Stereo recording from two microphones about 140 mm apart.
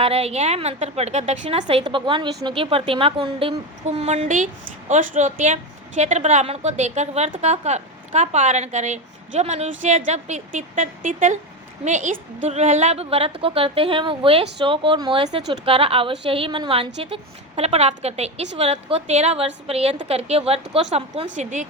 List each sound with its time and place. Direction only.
0.0 s a woman's voice: 45° right (ahead or behind)
1.8 s a woman's voice: 35° right (ahead or behind)
21.3 s speech: 65° right (ahead or behind)